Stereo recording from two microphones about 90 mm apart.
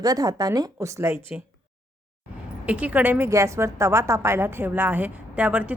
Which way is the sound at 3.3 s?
35° right (ahead or behind).